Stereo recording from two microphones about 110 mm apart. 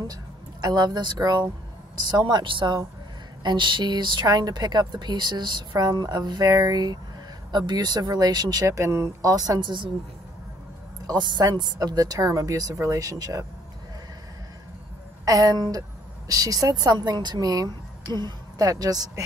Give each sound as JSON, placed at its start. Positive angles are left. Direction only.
{"t": 0.0, "sound": "a sound", "side_deg": -35}
{"t": 1.1, "sound": "a woman's voice", "side_deg": -35}
{"t": 11.1, "sound": "a woman's voice", "side_deg": -40}
{"t": 15.2, "sound": "a woman's voice", "side_deg": -30}